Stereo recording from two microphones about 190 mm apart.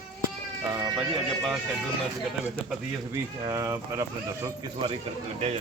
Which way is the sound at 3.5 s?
15° right (ahead or behind).